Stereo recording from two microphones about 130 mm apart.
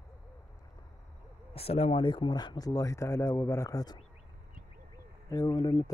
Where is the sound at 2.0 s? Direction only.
35° left (ahead or behind).